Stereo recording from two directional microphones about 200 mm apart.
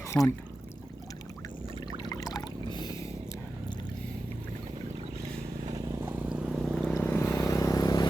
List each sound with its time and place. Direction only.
0.1 s speech: 10° left (ahead or behind)
2.0 s pour: 20° left (ahead or behind)
2.7 s a sound: 20° left (ahead or behind)
5.7 s vehicle: 15° right (ahead or behind); by 6.9 s centre (ahead or behind)
6.9 s vehicle: 10° left (ahead or behind)